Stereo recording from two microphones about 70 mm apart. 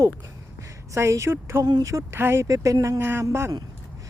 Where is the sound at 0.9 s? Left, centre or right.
Right.